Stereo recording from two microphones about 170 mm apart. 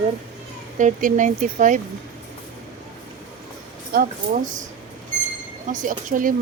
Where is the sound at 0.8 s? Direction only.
50° right (ahead or behind).